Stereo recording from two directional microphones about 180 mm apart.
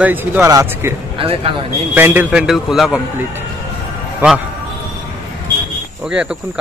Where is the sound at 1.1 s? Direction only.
30° right (ahead or behind).